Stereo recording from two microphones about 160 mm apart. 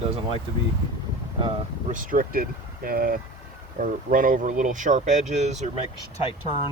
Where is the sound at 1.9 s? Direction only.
60° right (ahead or behind).